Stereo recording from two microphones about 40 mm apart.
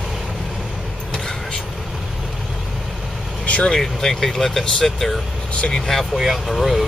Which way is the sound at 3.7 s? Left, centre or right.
Centre.